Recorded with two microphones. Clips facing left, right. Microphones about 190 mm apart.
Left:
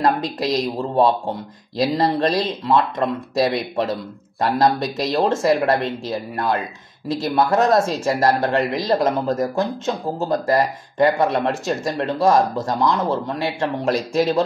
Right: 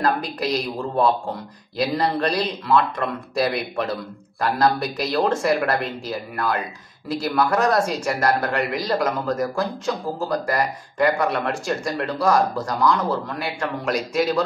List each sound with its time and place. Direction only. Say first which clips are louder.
0.9 s speech: left 3 dB; 25° left (ahead or behind)